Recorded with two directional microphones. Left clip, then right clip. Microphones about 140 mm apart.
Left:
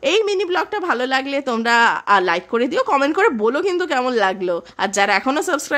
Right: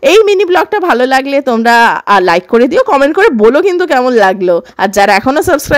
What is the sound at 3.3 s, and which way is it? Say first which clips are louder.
Speech: right 11 dB; 45° right (ahead or behind).